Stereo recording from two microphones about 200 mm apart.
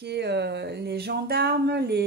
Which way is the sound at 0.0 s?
55° right (ahead or behind).